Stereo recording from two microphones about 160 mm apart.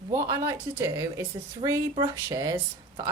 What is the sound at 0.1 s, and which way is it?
Speech, 20° right (ahead or behind).